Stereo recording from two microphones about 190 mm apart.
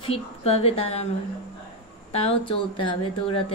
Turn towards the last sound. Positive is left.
turn(degrees=30)  # may be behind; listen again after turning